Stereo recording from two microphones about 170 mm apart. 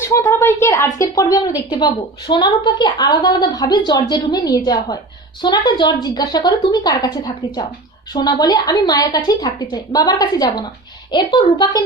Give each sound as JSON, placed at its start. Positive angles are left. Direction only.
{"t": 0.0, "sound": "a woman's voice", "side_deg": 15}